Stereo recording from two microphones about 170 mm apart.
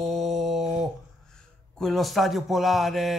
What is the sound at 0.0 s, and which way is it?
Mantra, centre (ahead or behind).